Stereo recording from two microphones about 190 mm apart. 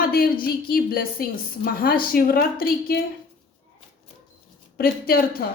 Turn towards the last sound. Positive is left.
turn(degrees=55)  # may be behind; listen again after turning